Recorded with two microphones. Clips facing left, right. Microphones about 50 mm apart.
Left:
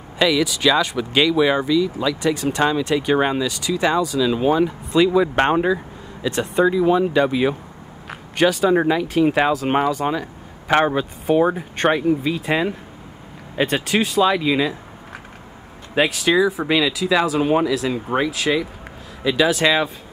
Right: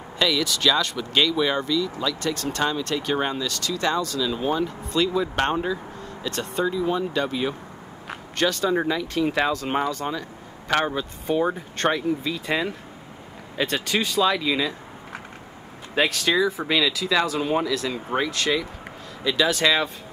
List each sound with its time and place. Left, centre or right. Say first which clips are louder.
0.2 s speech: left 5 dB; centre
5.3 s speech: left 6 dB; left
6.2 s speech: left 8 dB; centre
8.7 s speech: left 6 dB; left
10.0 s speech: left 7 dB; left
10.7 s speech: left 6 dB; left
15.9 s speech: left 4 dB; centre